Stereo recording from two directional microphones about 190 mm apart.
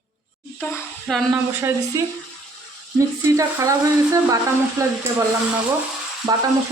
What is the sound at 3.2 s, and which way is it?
Speech, 15° right (ahead or behind).